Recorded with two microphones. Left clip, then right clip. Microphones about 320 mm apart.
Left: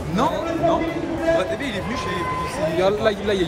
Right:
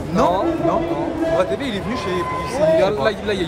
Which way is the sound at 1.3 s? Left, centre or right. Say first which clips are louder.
Right 2 dB; centre.